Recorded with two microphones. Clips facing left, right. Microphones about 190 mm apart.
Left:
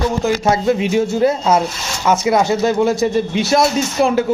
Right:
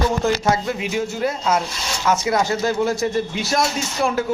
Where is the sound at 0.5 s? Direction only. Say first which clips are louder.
Left 7 dB; 25° left (ahead or behind).